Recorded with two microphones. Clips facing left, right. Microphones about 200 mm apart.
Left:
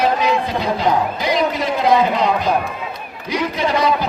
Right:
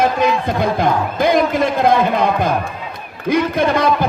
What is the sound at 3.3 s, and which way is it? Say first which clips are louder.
Speech: right 4 dB; 55° right (ahead or behind).